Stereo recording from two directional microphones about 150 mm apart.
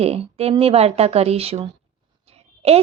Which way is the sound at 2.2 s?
45° right (ahead or behind).